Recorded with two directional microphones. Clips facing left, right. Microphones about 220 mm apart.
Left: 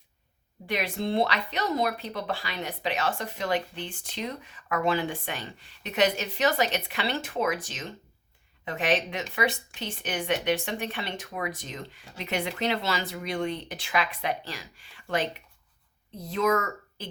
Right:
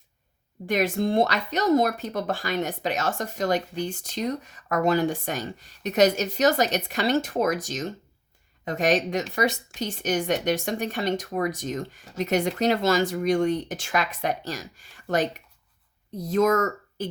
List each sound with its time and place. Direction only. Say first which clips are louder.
0.7 s speech: right 5 dB; 45° right (ahead or behind)